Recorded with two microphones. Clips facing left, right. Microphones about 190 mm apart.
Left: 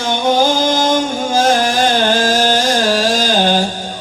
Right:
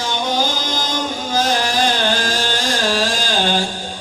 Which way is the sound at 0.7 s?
55° left (ahead or behind).